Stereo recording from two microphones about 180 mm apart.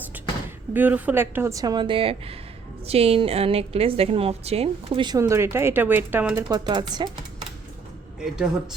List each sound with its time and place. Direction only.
0.7 s a woman's voice: 10° right (ahead or behind); by 5.2 s 25° right (ahead or behind)
5.2 s speech: 15° right (ahead or behind)
6.7 s speech: 25° right (ahead or behind)